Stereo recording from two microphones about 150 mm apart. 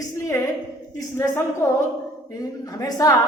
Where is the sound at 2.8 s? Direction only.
25° left (ahead or behind).